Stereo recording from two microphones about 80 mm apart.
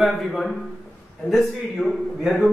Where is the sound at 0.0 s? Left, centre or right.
Centre.